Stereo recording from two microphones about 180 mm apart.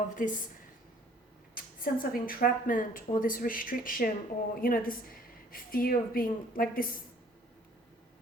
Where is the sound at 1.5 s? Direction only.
50° left (ahead or behind).